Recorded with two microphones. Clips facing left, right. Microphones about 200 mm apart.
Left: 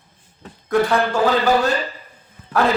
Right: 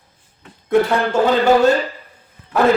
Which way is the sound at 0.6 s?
25° right (ahead or behind).